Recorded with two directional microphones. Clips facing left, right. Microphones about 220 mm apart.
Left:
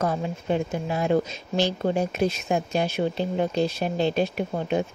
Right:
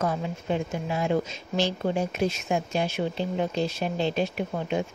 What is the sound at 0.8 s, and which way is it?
Speech, 40° left (ahead or behind).